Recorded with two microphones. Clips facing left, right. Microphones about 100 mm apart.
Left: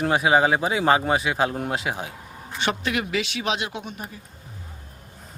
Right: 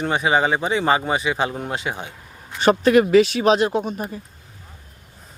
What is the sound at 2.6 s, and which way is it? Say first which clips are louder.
Speech: right 11 dB; 40° right (ahead or behind).